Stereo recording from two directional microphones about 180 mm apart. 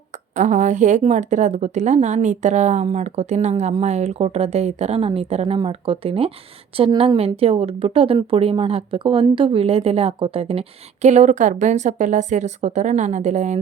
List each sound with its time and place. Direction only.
0.3 s speech: 45° right (ahead or behind)